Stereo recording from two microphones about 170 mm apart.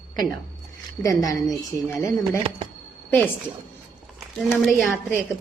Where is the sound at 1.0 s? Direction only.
20° left (ahead or behind).